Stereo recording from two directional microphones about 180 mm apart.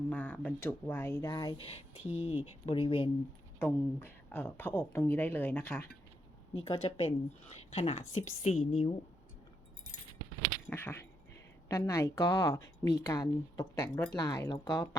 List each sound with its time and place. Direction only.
0.1 s speech: 10° left (ahead or behind); by 3.1 s 30° left (ahead or behind)
3.6 s speech: 10° left (ahead or behind)
6.5 s a woman's voice: 30° left (ahead or behind)
10.4 s a sound: 10° left (ahead or behind)
11.7 s speech: 15° left (ahead or behind)